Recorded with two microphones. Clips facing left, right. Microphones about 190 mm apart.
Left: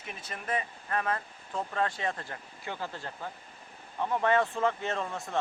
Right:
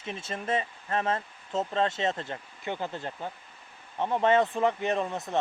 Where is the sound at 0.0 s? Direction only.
25° right (ahead or behind).